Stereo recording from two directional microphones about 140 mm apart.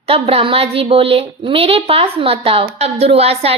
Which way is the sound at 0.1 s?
45° right (ahead or behind).